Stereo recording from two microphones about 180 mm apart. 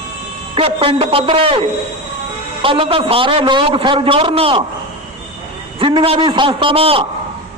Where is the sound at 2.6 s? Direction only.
30° right (ahead or behind).